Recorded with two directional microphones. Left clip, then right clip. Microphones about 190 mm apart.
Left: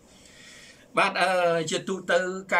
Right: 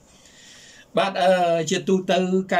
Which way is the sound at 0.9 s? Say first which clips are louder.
Right 4 dB; 20° right (ahead or behind).